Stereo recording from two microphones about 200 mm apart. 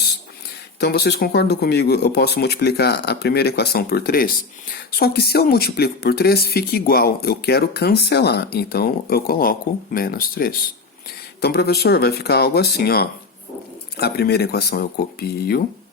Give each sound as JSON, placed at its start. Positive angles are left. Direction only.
{"t": 0.8, "sound": "speech", "side_deg": 55}